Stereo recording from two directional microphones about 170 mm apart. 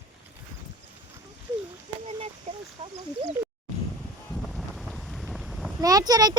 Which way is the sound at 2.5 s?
45° right (ahead or behind).